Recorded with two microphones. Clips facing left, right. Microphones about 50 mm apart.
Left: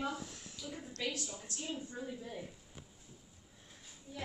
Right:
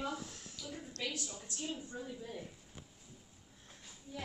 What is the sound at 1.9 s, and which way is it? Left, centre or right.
Speech, centre.